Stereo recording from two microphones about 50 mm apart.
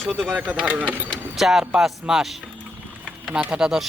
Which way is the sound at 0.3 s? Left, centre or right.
Right.